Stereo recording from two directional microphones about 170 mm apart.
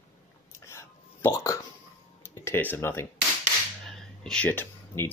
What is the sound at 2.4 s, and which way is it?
Speech, 15° left (ahead or behind).